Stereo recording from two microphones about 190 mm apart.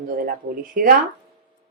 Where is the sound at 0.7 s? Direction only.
50° right (ahead or behind).